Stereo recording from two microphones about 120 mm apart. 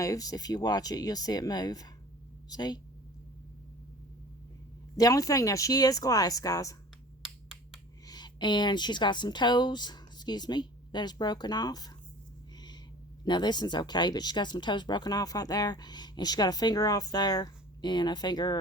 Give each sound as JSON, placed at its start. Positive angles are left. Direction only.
{"t": 0.0, "sound": "speech", "side_deg": 30}
{"t": 4.9, "sound": "speech", "side_deg": 30}
{"t": 8.0, "sound": "speech", "side_deg": 35}
{"t": 13.2, "sound": "speech", "side_deg": 35}